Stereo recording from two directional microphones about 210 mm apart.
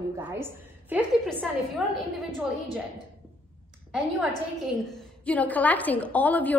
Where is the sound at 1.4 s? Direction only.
Centre (ahead or behind).